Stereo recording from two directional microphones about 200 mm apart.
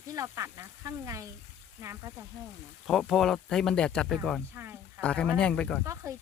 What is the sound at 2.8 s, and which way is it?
Speech, centre (ahead or behind).